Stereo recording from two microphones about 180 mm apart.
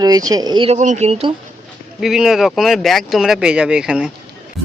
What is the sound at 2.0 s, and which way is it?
Speech, centre (ahead or behind).